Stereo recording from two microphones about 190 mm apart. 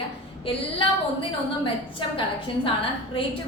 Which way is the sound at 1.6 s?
25° left (ahead or behind).